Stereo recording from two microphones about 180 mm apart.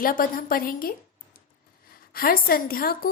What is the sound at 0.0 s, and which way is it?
Speech, 50° left (ahead or behind).